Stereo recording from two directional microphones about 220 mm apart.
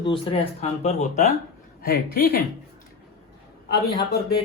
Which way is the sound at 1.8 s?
45° left (ahead or behind).